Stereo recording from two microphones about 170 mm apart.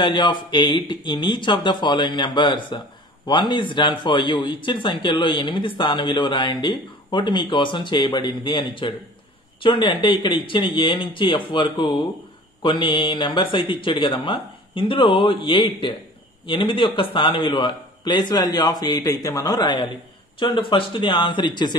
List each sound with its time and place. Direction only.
0.0 s speech: 25° left (ahead or behind)